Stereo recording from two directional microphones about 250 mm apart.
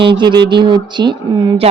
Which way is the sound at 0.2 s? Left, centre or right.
Centre.